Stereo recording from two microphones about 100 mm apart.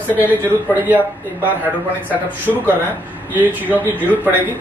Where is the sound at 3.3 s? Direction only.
15° right (ahead or behind).